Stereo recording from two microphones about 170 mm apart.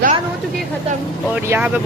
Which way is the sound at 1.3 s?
10° right (ahead or behind).